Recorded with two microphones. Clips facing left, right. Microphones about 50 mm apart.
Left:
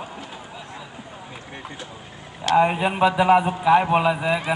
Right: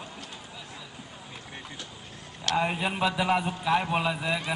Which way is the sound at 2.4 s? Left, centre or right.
Centre.